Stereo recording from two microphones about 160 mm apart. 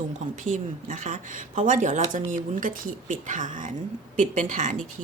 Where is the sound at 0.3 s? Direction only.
50° right (ahead or behind).